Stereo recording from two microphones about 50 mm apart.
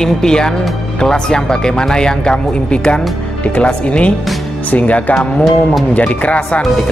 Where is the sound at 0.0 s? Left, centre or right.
Centre.